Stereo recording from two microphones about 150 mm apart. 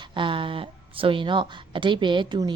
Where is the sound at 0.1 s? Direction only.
35° right (ahead or behind).